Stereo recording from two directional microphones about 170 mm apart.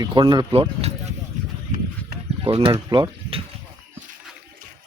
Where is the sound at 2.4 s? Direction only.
30° right (ahead or behind).